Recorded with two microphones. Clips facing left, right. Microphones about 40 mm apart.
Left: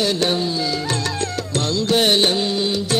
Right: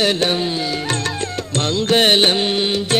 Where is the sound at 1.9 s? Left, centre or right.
Right.